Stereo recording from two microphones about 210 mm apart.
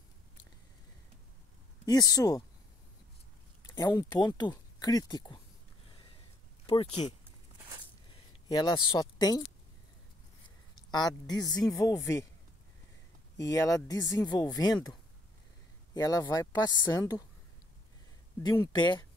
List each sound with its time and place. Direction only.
1.9 s speech: 15° left (ahead or behind)
3.7 s speech: 15° left (ahead or behind)
6.6 s speech: 25° left (ahead or behind)
8.1 s speech: 20° left (ahead or behind)
10.9 s a woman's voice: 20° left (ahead or behind)
13.4 s speech: 15° left (ahead or behind)
18.4 s a woman's voice: 20° left (ahead or behind)